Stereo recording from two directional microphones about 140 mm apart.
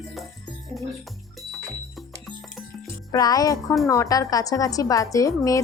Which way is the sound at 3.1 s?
25° left (ahead or behind).